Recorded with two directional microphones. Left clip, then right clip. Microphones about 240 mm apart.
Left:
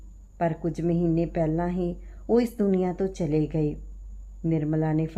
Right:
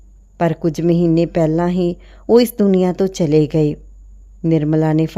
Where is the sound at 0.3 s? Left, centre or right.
Right.